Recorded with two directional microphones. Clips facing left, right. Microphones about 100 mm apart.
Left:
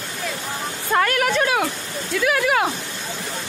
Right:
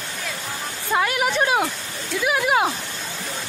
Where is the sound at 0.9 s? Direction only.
10° right (ahead or behind).